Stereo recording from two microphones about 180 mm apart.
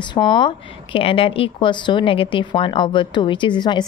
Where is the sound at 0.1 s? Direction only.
25° left (ahead or behind).